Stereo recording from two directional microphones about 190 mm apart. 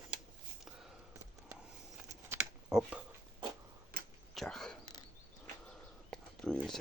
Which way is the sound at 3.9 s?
50° right (ahead or behind).